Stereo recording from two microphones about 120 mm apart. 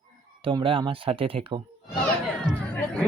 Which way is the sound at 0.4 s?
45° right (ahead or behind).